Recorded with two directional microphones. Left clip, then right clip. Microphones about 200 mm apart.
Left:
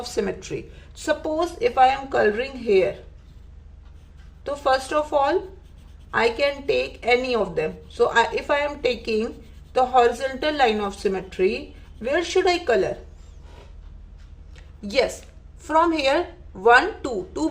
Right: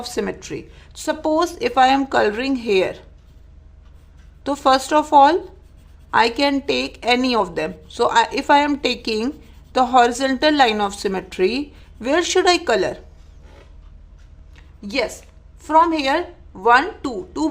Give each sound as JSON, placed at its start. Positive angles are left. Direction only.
{"t": 0.0, "sound": "speech", "side_deg": -20}
{"t": 4.4, "sound": "speech", "side_deg": -50}
{"t": 14.5, "sound": "a sound", "side_deg": -15}
{"t": 15.6, "sound": "speech", "side_deg": -20}